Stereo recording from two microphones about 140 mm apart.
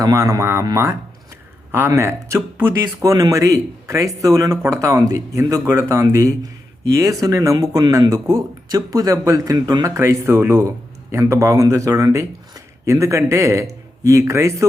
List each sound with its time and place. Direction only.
0.0 s speech: 25° right (ahead or behind)